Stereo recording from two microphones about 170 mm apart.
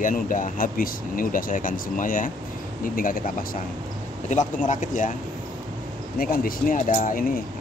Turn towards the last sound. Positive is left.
turn(degrees=55)  # may be behind; listen again after turning